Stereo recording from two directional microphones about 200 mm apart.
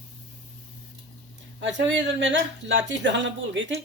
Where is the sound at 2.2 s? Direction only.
65° right (ahead or behind).